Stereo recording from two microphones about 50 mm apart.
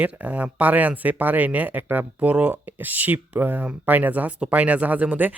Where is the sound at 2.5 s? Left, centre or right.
Right.